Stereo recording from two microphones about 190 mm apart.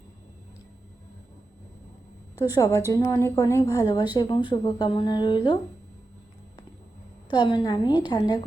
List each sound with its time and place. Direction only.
2.6 s a woman's voice: 15° left (ahead or behind)
7.3 s speech: 25° left (ahead or behind)